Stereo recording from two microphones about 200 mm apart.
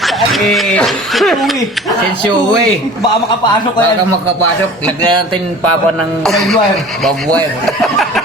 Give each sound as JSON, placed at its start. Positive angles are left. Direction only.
{"t": 0.0, "sound": "speech", "side_deg": 0}
{"t": 6.2, "sound": "speech", "side_deg": 0}
{"t": 7.8, "sound": "speech", "side_deg": 0}